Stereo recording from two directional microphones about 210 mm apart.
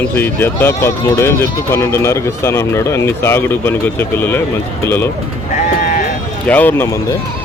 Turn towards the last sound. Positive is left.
turn(degrees=15)  # may be behind; listen again after turning